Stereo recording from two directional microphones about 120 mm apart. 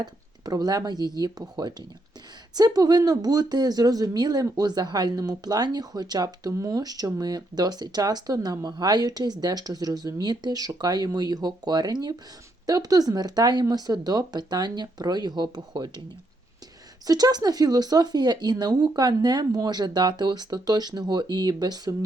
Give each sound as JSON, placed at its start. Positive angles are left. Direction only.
{"t": 0.0, "sound": "speech", "side_deg": -35}
{"t": 17.1, "sound": "speech", "side_deg": -35}